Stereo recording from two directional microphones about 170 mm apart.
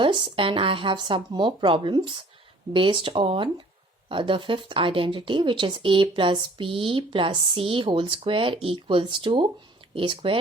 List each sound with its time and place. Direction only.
0.0 s speech: 30° right (ahead or behind)